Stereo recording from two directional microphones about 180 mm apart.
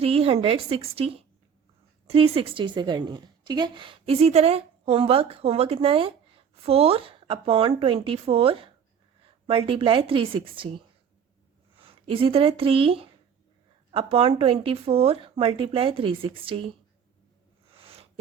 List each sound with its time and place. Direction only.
0.0 s a woman's voice: 30° right (ahead or behind)